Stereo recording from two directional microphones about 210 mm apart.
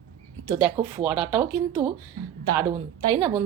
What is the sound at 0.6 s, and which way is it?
Speech, 10° right (ahead or behind).